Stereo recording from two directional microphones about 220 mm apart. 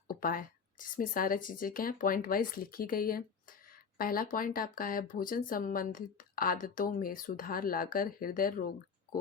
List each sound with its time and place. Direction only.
0.1 s speech: 40° left (ahead or behind)